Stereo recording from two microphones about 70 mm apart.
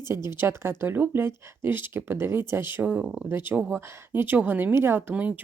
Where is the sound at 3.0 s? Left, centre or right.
Centre.